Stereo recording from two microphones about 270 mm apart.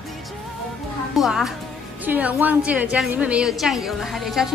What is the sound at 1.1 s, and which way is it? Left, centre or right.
A woman's voice, centre.